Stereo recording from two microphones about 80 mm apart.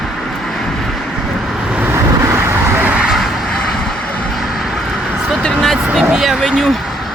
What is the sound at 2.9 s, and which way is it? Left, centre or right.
Vehicle, centre.